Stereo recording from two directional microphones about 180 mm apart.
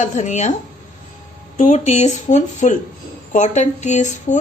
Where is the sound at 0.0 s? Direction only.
40° left (ahead or behind).